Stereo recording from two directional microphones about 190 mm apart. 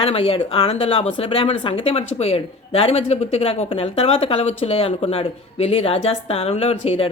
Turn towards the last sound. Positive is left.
turn(degrees=30)  # may be behind; listen again after turning